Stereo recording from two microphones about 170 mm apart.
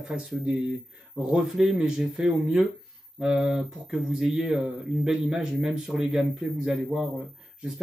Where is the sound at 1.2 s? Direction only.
5° right (ahead or behind).